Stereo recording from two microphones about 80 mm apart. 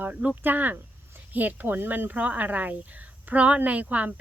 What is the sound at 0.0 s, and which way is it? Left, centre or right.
Speech, centre.